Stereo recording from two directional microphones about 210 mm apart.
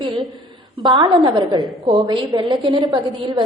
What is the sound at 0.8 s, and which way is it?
A woman's voice, 20° right (ahead or behind).